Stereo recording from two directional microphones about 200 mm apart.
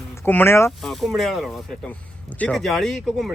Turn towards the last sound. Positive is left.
turn(degrees=0)  # may be behind; listen again after turning